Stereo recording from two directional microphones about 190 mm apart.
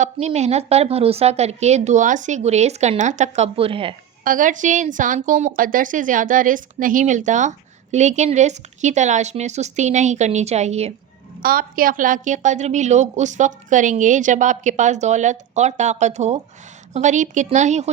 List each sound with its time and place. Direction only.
0.0 s a woman's voice: 35° right (ahead or behind)
4.2 s a woman's voice: 45° right (ahead or behind)
11.4 s a woman's voice: 50° right (ahead or behind)